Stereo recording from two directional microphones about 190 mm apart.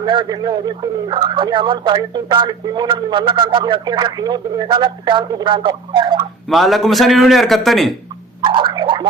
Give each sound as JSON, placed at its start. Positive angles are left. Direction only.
{"t": 0.0, "sound": "speech", "side_deg": -25}
{"t": 6.5, "sound": "a man's voice", "side_deg": 0}
{"t": 8.4, "sound": "a sound", "side_deg": -25}